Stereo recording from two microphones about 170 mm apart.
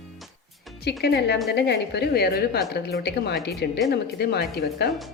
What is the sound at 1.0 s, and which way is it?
A woman's voice, 80° left.